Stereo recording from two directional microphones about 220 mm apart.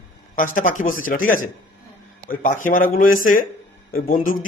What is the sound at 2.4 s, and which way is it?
Speech, 40° left (ahead or behind).